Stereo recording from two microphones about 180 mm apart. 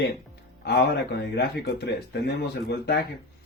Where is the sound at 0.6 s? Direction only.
70° left (ahead or behind).